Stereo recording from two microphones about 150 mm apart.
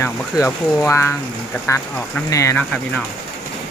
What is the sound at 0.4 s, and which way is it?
Speech, 20° left (ahead or behind).